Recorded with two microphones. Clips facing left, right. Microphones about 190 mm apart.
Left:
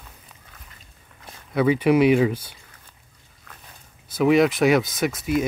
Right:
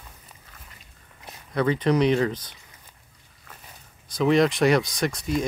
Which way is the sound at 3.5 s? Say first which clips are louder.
Even; 5° right (ahead or behind).